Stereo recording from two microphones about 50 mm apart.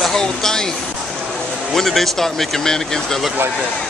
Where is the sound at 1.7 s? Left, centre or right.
Centre.